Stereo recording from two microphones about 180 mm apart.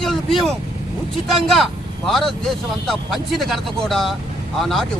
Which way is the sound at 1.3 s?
Centre (ahead or behind).